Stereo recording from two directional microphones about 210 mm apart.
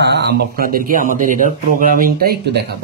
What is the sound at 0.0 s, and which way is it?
Speech, 55° right (ahead or behind).